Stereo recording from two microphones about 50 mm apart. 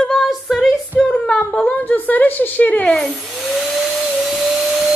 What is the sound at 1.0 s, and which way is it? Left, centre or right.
A woman's voice, left.